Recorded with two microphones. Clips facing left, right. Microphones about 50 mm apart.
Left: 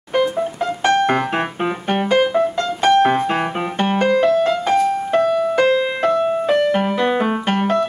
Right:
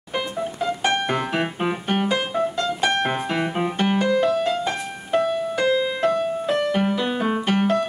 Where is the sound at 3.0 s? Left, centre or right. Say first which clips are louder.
Left 7 dB; left.